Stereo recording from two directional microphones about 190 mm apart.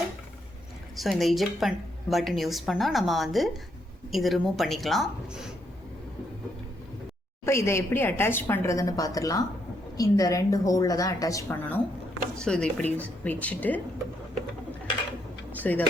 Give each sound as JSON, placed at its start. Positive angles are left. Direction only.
{"t": 0.9, "sound": "a woman's voice", "side_deg": 0}
{"t": 7.4, "sound": "a woman's voice", "side_deg": 15}
{"t": 15.5, "sound": "a sound", "side_deg": 10}